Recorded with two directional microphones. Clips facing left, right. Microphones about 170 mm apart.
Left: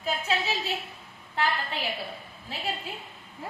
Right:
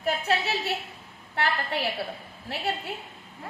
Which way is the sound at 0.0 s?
65° right (ahead or behind).